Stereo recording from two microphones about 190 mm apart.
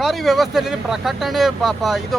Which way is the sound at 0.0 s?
Centre (ahead or behind).